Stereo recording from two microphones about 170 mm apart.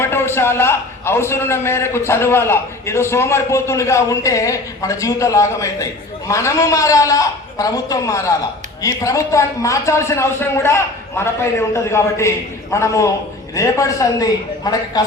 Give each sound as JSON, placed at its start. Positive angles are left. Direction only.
{"t": 0.0, "sound": "a man's voice", "side_deg": 15}